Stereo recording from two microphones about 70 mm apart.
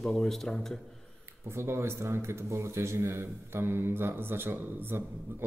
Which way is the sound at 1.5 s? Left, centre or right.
Right.